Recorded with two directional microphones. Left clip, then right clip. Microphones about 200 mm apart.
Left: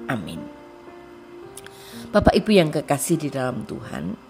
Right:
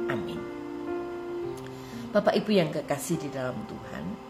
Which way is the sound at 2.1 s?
40° left (ahead or behind).